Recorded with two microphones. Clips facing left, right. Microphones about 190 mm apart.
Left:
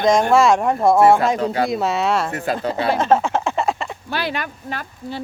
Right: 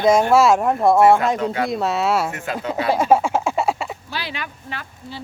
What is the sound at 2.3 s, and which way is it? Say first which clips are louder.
Speech: left 3 dB; 35° left (ahead or behind).